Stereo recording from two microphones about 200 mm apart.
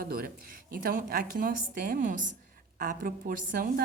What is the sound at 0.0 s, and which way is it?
A woman's voice, 50° right (ahead or behind).